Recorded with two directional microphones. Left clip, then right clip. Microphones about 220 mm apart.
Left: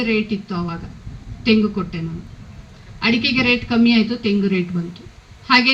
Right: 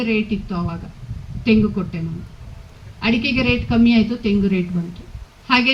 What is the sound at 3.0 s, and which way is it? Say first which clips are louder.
A man's voice: left 2 dB; 20° left (ahead or behind).